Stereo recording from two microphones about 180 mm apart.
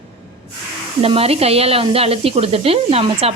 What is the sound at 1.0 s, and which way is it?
A woman's voice, 35° right (ahead or behind).